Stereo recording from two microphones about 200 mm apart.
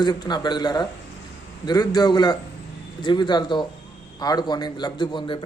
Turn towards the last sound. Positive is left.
turn(degrees=25)  # may be behind; listen again after turning